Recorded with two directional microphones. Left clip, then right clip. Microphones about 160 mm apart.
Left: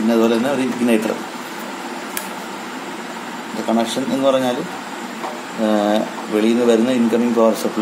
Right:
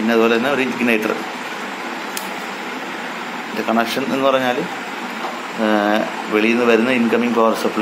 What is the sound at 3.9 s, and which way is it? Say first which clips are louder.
Speech: even; 10° left (ahead or behind).